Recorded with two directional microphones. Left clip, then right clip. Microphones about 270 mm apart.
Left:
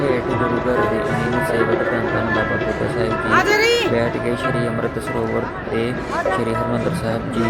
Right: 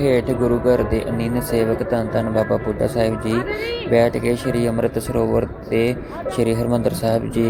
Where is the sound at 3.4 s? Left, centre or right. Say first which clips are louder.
Left 9 dB; left.